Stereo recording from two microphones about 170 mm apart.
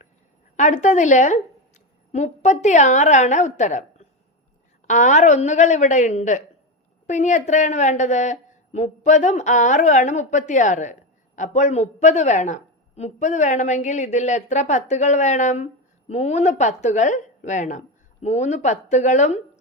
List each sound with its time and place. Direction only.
0.5 s a woman's voice: 45° left (ahead or behind)